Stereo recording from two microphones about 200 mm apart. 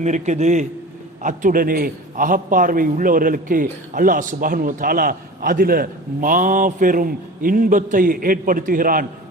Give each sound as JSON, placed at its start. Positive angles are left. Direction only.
{"t": 0.0, "sound": "a man's voice", "side_deg": -35}